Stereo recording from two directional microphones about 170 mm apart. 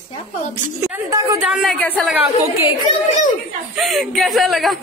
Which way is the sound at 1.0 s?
20° right (ahead or behind).